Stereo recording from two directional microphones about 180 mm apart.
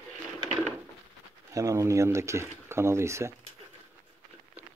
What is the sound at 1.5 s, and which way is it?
Speech, 20° right (ahead or behind).